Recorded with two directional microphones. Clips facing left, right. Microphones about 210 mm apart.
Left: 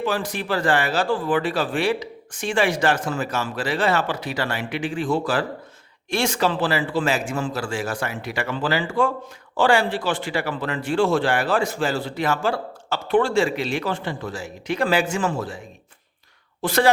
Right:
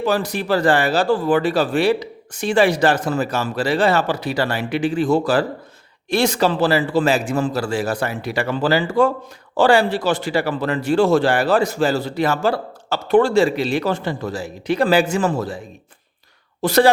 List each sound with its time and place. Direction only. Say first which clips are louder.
0.0 s a man's voice: right 5 dB; 40° right (ahead or behind)